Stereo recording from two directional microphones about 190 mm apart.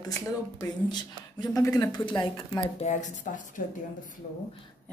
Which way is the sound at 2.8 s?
40° left (ahead or behind).